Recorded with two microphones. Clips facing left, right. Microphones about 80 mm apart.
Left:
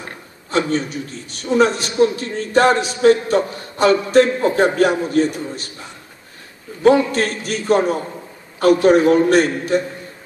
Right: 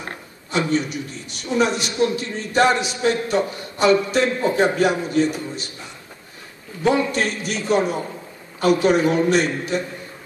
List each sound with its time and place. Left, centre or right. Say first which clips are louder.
0.5 s a man's voice: left 2 dB; left
6.8 s a man's voice: left 5 dB; left